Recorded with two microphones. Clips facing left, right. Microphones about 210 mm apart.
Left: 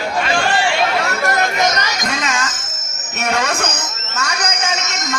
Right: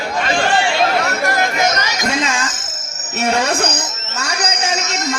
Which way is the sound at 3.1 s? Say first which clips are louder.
Right 3 dB; 30° right (ahead or behind).